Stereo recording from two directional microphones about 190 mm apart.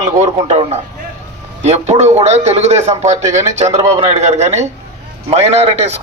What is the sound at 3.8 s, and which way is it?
Speech, 20° right (ahead or behind).